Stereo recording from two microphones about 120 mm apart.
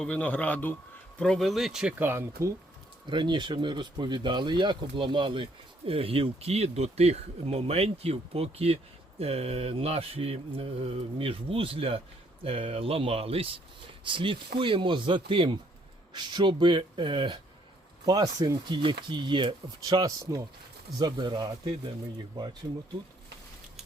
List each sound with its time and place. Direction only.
0.0 s a man's voice: 10° left (ahead or behind)
1.2 s speech: 5° left (ahead or behind)
2.0 s speech: 20° right (ahead or behind)
3.1 s speech: 40° right (ahead or behind)